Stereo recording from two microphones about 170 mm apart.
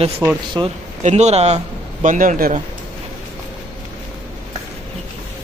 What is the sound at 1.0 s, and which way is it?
A man's voice, 40° right (ahead or behind).